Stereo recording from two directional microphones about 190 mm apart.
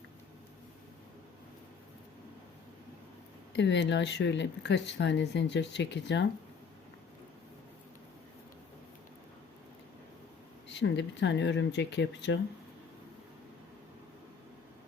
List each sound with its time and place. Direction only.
3.5 s speech: 70° left (ahead or behind)
10.7 s speech: 65° left (ahead or behind)